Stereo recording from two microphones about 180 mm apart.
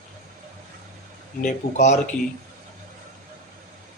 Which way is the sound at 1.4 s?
45° left (ahead or behind).